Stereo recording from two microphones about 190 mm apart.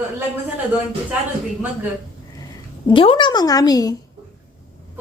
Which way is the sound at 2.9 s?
25° left (ahead or behind).